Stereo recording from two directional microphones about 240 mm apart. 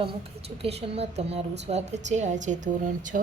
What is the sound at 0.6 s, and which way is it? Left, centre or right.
A woman's voice, right.